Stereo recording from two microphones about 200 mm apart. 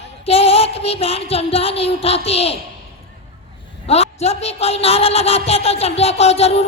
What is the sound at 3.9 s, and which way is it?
A woman's voice, 30° left (ahead or behind).